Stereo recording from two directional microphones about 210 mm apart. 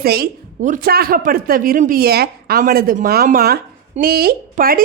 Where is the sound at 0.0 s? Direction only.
50° right (ahead or behind).